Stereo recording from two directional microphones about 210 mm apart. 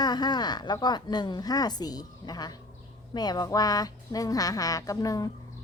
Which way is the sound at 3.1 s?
20° left (ahead or behind).